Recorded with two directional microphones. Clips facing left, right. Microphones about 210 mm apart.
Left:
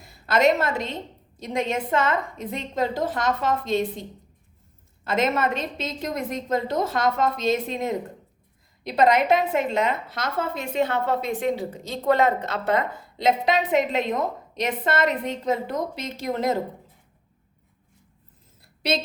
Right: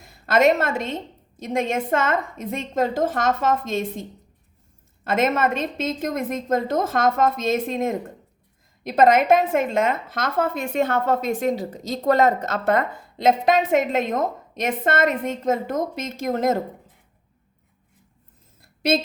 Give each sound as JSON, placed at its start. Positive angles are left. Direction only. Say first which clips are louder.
{"t": 0.0, "sound": "a woman's voice", "louder": "right 2 dB", "side_deg": -50}
{"t": 5.0, "sound": "a woman's voice", "louder": "right 2 dB", "side_deg": -50}
{"t": 18.6, "sound": "a sound", "louder": "right 4 dB", "side_deg": -50}